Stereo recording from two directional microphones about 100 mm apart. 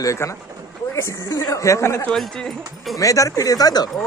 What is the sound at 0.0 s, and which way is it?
Speech, 30° left (ahead or behind).